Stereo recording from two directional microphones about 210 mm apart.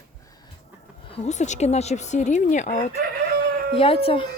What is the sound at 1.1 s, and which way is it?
Speech, 30° left (ahead or behind).